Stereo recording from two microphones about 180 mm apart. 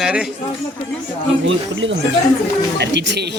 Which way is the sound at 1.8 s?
90° right.